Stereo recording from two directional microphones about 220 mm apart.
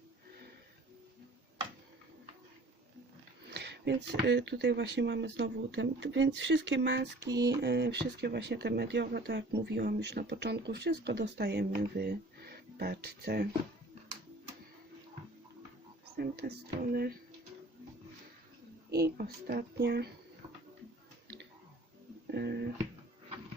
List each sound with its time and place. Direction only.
3.5 s speech: 50° right (ahead or behind)
16.1 s music: 45° right (ahead or behind)
16.9 s speech: 45° right (ahead or behind)
18.9 s speech: 45° right (ahead or behind)
22.3 s music: 50° right (ahead or behind)